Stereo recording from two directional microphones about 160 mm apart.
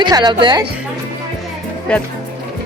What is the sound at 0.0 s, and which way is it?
Speech, 25° right (ahead or behind).